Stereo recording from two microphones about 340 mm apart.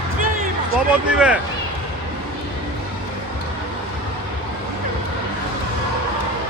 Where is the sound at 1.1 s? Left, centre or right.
Centre.